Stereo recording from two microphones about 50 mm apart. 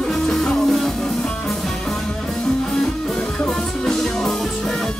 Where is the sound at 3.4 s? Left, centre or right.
Centre.